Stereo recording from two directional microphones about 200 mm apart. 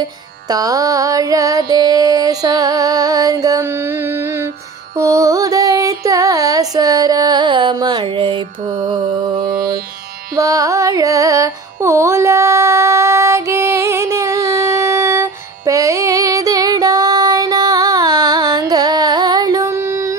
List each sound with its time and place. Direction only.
0.5 s music: 20° right (ahead or behind)
4.9 s mantra: 15° right (ahead or behind)
9.4 s mantra: 45° right (ahead or behind)
10.3 s music: 15° right (ahead or behind)